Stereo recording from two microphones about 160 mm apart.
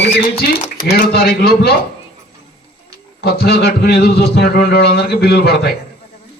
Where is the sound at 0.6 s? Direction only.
60° left (ahead or behind).